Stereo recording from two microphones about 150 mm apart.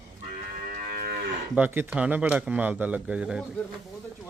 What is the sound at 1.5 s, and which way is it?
Speech, 10° right (ahead or behind).